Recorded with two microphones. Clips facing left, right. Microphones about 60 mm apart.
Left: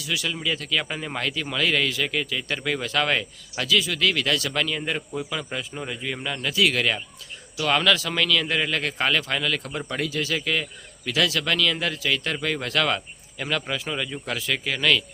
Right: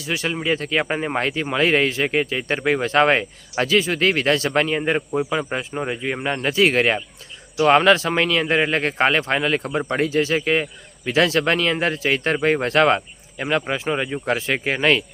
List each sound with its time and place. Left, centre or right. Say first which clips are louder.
0.0 s speech: right 4 dB; right